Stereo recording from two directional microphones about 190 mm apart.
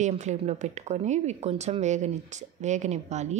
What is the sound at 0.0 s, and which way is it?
A woman's voice, 40° right (ahead or behind).